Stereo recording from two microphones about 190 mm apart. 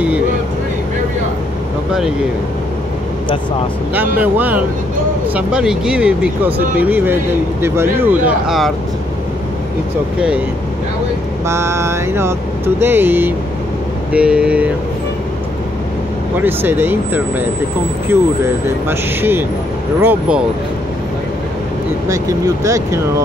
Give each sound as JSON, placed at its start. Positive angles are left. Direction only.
{"t": 3.9, "sound": "vehicle", "side_deg": -10}
{"t": 11.4, "sound": "vehicle", "side_deg": -15}
{"t": 14.1, "sound": "speech", "side_deg": -5}
{"t": 16.3, "sound": "vehicle", "side_deg": -10}
{"t": 22.0, "sound": "vehicle", "side_deg": -15}